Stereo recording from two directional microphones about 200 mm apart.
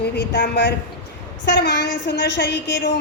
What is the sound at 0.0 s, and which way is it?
A woman's voice, 55° left (ahead or behind).